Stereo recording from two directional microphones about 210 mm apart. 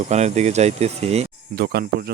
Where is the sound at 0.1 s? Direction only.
35° right (ahead or behind).